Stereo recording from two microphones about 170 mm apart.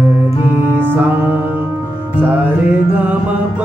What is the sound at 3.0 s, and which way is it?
Speech, 10° right (ahead or behind).